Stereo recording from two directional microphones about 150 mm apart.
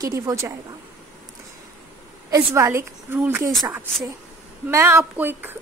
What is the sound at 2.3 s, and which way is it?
A woman's voice, 15° right (ahead or behind).